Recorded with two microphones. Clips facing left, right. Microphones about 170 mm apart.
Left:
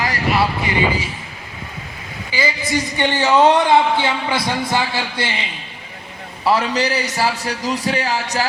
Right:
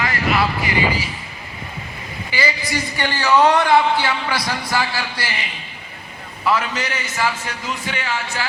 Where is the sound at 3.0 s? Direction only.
25° left (ahead or behind).